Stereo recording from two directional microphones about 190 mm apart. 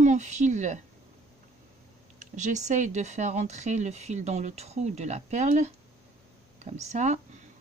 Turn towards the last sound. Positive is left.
turn(degrees=-40)  # may be behind; listen again after turning